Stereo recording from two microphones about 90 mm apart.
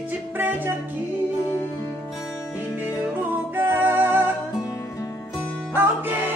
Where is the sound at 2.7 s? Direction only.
20° right (ahead or behind).